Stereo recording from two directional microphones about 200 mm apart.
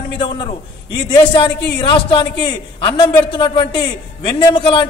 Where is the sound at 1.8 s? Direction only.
25° left (ahead or behind).